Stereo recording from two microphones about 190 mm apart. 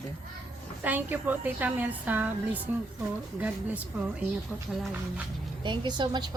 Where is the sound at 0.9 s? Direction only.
10° right (ahead or behind).